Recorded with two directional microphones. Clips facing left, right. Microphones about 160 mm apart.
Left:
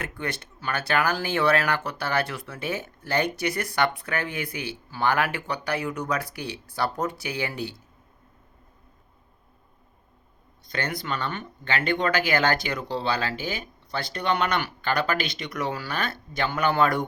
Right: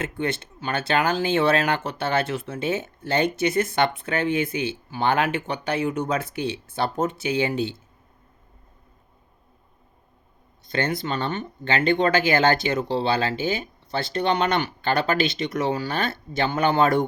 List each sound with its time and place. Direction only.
0.0 s speech: 25° right (ahead or behind)
10.7 s speech: 25° right (ahead or behind)